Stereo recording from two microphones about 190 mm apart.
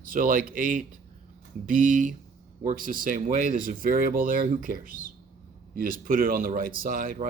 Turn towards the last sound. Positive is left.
turn(degrees=-45)  # may be behind; listen again after turning